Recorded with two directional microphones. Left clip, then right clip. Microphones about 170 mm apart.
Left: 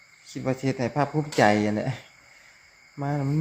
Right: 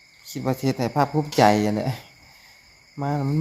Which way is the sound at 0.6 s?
25° right (ahead or behind).